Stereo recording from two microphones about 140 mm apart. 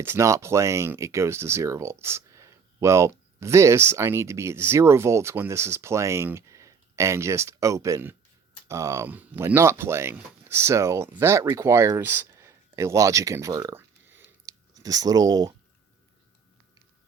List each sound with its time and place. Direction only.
0.0 s speech: 20° right (ahead or behind)
14.1 s chewing: 15° right (ahead or behind)
14.4 s speech: 25° right (ahead or behind)